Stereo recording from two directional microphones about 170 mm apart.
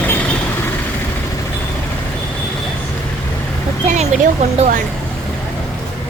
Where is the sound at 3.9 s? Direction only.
40° right (ahead or behind).